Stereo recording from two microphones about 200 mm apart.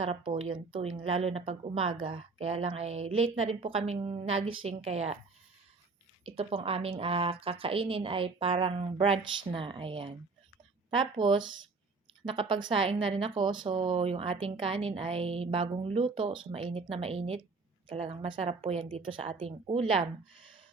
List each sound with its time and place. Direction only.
0.3 s a woman's voice: 25° right (ahead or behind)
4.3 s speech: 90° right
4.6 s a woman's voice: 30° right (ahead or behind)
6.2 s a woman's voice: 30° right (ahead or behind)